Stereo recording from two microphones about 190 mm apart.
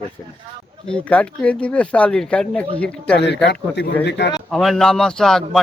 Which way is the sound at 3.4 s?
60° left (ahead or behind).